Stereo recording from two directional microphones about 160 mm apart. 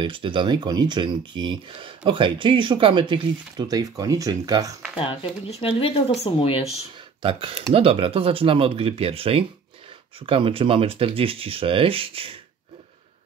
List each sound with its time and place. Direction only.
0.0 s speech: 30° right (ahead or behind)
4.9 s speech: 35° left (ahead or behind)
7.2 s speech: 35° right (ahead or behind)